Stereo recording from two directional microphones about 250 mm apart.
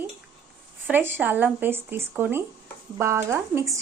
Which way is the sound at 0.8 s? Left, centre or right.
Centre.